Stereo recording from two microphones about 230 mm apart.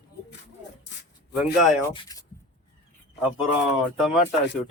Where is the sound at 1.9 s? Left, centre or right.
Centre.